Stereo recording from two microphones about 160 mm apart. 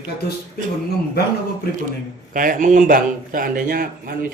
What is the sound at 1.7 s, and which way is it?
Speech, 75° left (ahead or behind).